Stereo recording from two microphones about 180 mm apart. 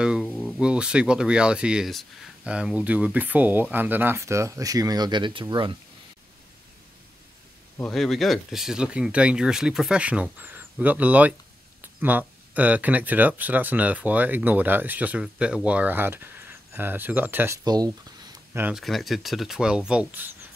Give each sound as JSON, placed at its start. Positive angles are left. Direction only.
{"t": 0.0, "sound": "speech", "side_deg": 0}
{"t": 7.8, "sound": "speech", "side_deg": 0}
{"t": 17.6, "sound": "speech", "side_deg": -20}
{"t": 18.5, "sound": "speech", "side_deg": -10}
{"t": 18.8, "sound": "speech", "side_deg": 0}